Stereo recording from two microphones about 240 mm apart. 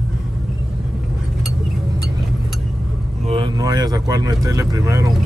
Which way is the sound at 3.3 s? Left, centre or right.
Centre.